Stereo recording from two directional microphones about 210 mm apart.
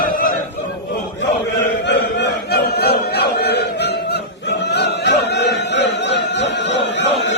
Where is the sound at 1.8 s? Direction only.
55° left (ahead or behind).